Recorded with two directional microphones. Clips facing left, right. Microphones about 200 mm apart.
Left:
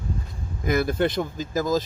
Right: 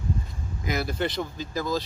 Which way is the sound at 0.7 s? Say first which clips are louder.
Left 6 dB; 55° left (ahead or behind).